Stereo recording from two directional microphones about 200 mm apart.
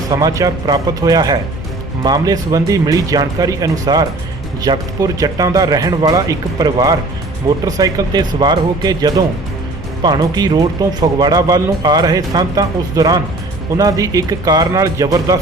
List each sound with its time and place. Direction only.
0.1 s speech: 20° right (ahead or behind)